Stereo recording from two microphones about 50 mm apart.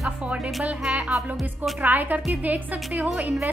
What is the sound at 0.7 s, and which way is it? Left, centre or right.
A woman's voice, right.